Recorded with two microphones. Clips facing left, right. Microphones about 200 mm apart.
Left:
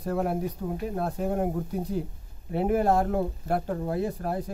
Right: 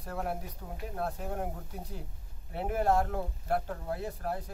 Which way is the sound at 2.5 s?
15° left (ahead or behind).